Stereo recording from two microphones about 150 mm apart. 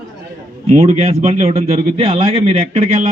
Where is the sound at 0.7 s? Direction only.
45° right (ahead or behind).